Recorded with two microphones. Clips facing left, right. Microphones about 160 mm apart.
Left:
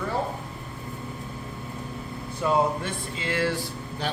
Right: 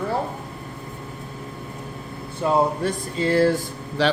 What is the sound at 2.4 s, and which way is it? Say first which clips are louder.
Speech: right 4 dB; 40° right (ahead or behind).